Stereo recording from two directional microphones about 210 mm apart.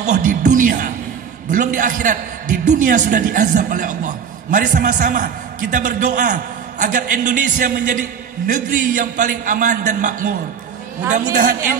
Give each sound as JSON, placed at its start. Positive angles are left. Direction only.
{"t": 0.0, "sound": "a man's voice", "side_deg": -35}
{"t": 11.3, "sound": "a man's voice", "side_deg": -40}